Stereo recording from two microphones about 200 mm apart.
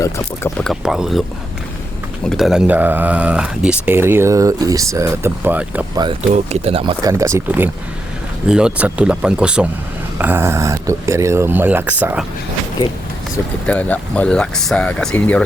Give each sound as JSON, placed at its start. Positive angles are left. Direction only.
{"t": 0.6, "sound": "speech", "side_deg": 0}
{"t": 2.2, "sound": "speech", "side_deg": 0}
{"t": 6.3, "sound": "speech", "side_deg": -30}
{"t": 13.7, "sound": "speech", "side_deg": 5}